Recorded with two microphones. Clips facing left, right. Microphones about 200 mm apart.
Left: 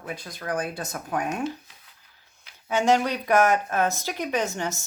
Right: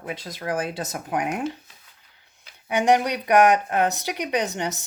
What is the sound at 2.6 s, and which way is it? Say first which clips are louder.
Speech: right 2 dB; 15° right (ahead or behind).